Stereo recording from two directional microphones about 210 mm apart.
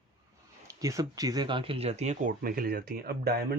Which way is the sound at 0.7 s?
15° right (ahead or behind).